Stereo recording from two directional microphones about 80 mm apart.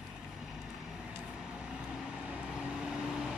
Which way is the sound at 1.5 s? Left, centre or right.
Centre.